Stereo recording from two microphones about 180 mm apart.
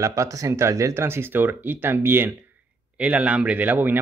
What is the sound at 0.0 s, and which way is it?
Speech, 20° right (ahead or behind).